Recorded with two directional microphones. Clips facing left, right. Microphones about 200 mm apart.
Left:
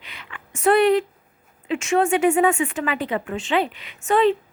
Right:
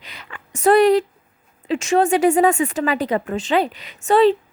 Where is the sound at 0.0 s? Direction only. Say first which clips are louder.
Right 2 dB; 40° right (ahead or behind).